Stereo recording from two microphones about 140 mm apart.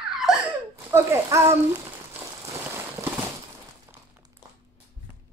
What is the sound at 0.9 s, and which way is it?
Speech, 20° right (ahead or behind).